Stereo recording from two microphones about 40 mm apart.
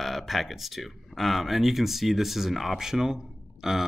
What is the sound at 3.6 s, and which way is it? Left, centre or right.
Burping, centre.